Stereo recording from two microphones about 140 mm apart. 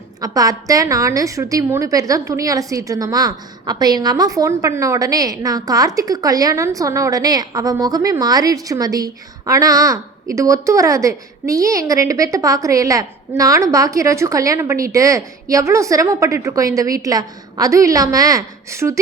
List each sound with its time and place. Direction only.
0.2 s a woman's voice: 25° right (ahead or behind)